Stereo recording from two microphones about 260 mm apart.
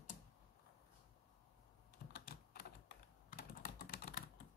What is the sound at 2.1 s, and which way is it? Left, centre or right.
Typing, left.